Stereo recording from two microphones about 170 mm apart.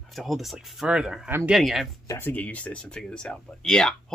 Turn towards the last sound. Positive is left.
turn(degrees=5)  # may be behind; listen again after turning